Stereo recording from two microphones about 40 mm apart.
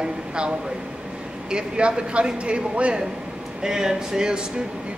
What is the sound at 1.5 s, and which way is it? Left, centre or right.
Speech, right.